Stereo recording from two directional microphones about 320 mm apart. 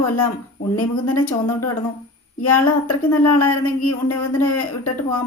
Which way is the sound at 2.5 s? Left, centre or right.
Left.